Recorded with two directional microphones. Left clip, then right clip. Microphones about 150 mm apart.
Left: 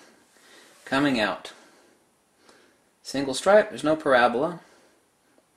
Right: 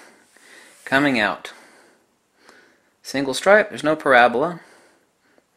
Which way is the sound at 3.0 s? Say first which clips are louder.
Right 5 dB; 25° right (ahead or behind).